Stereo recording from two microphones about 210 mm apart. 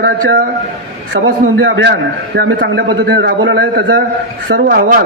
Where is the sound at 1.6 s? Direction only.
60° right (ahead or behind).